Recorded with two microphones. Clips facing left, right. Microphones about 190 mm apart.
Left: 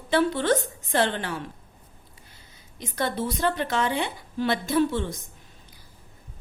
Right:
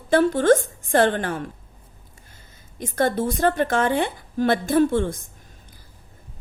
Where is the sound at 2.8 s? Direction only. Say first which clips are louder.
Right 6 dB; 50° right (ahead or behind).